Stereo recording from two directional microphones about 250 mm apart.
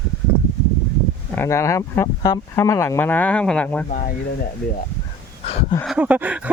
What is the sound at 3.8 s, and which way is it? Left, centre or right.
Speech, left.